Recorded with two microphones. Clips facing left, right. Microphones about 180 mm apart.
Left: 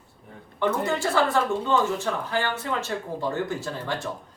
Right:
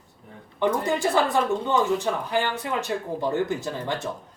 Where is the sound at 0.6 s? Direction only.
15° right (ahead or behind).